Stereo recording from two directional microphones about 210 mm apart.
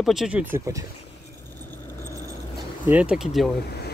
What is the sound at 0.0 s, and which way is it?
Speech, centre (ahead or behind).